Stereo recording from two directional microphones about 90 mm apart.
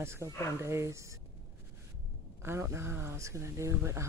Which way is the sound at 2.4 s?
30° right (ahead or behind).